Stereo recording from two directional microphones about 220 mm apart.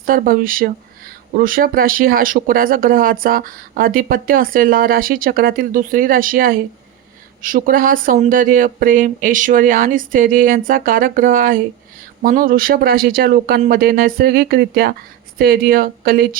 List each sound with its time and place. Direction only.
0.0 s speech: 40° right (ahead or behind)